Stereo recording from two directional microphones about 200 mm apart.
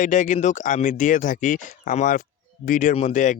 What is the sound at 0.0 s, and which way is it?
Speech, 40° left (ahead or behind).